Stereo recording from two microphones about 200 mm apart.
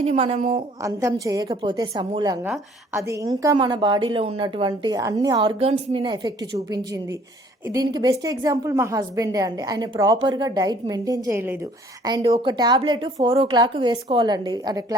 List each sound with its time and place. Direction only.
0.0 s a woman's voice: 30° right (ahead or behind)
0.8 s a woman's voice: 15° right (ahead or behind)